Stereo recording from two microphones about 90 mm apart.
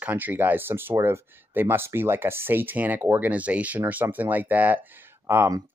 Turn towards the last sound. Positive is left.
turn(degrees=-30)  # may be behind; listen again after turning